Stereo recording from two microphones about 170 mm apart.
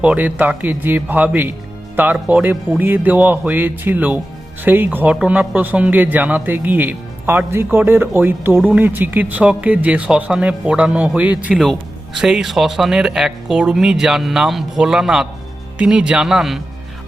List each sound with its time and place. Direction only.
0.0 s speech: 10° right (ahead or behind)